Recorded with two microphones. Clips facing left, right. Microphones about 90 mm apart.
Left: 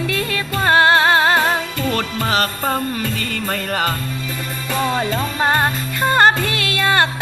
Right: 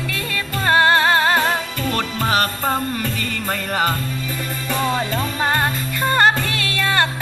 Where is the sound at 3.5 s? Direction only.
15° right (ahead or behind).